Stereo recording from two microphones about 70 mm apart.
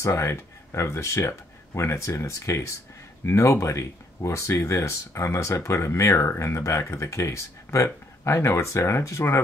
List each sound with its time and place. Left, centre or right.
0.0 s speech: left